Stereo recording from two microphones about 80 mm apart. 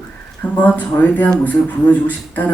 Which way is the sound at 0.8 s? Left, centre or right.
Centre.